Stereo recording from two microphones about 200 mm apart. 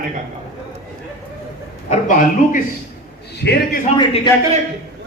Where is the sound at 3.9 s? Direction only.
25° left (ahead or behind).